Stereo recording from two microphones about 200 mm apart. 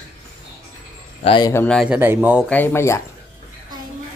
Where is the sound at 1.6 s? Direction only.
Centre (ahead or behind).